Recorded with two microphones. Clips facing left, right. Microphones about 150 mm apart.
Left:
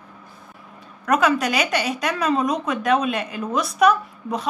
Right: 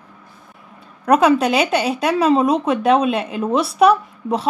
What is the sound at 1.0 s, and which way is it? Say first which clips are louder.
A woman's voice: right 5 dB; 35° right (ahead or behind).